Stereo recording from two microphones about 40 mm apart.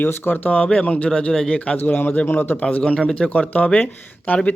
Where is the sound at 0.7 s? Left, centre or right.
Left.